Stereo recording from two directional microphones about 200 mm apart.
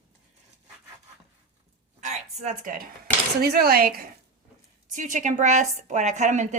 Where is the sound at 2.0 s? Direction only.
35° right (ahead or behind).